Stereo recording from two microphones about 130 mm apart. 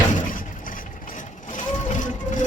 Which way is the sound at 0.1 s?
90° left.